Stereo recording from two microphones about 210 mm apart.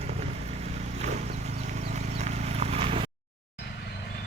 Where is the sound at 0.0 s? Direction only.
30° right (ahead or behind).